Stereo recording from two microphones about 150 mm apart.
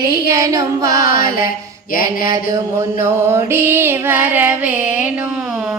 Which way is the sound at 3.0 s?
20° right (ahead or behind).